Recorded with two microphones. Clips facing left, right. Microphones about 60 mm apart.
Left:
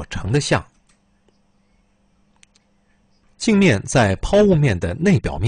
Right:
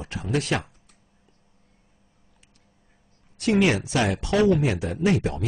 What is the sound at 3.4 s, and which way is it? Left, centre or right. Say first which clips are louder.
Speech: left 5 dB; left.